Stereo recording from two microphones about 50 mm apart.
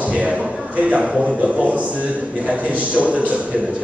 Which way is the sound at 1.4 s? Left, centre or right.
Right.